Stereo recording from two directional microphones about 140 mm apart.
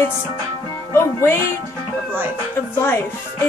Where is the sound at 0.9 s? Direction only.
20° left (ahead or behind).